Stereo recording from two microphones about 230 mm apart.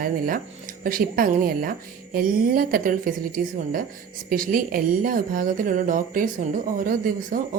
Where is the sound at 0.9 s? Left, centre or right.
Right.